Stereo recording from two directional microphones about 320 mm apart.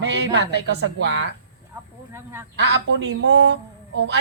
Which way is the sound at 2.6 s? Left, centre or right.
Right.